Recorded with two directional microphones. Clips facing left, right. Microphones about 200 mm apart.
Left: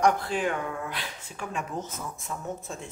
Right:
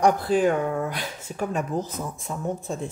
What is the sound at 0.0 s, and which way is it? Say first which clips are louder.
Speech: right 5 dB; 40° right (ahead or behind).